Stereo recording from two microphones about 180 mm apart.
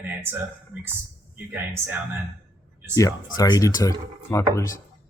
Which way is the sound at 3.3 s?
20° left (ahead or behind).